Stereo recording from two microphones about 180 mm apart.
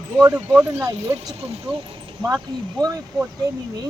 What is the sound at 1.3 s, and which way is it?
Speech, 35° right (ahead or behind).